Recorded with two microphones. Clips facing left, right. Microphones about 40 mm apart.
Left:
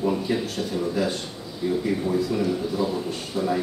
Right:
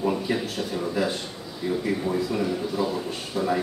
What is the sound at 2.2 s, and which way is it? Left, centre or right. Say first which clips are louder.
A man's voice: left 2 dB; centre.